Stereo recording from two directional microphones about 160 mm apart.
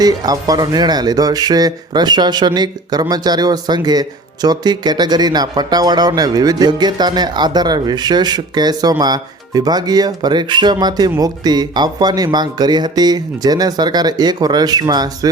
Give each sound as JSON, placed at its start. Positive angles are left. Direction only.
{"t": 0.0, "sound": "speech", "side_deg": -25}